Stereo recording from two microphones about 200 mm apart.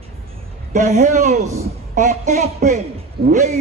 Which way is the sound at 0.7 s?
35° right (ahead or behind).